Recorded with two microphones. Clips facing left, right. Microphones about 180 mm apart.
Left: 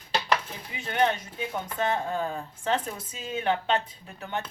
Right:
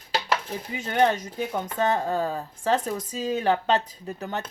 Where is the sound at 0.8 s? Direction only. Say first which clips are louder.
Right 3 dB; 40° right (ahead or behind).